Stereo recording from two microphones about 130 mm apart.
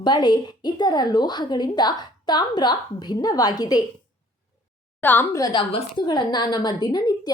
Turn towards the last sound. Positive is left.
turn(degrees=30)  # may be behind; listen again after turning